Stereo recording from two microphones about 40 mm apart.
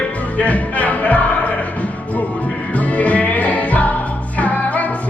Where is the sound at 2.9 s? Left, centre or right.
Left.